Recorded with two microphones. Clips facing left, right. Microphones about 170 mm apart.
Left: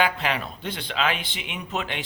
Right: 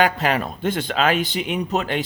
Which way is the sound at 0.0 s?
45° right (ahead or behind).